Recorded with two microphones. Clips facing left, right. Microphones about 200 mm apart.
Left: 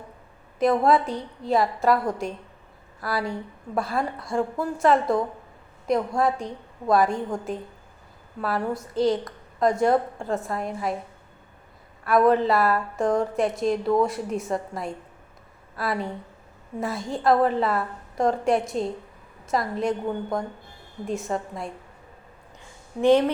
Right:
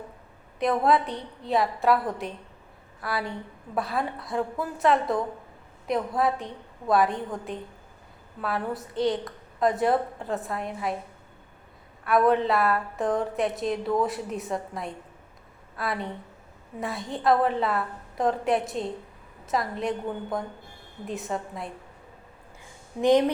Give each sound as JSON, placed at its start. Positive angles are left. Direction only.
{"t": 0.6, "sound": "a woman's voice", "side_deg": 0}
{"t": 12.0, "sound": "a woman's voice", "side_deg": 0}
{"t": 23.0, "sound": "speech", "side_deg": -15}